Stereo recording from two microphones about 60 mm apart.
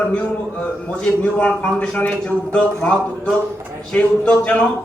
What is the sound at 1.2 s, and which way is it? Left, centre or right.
Speech, left.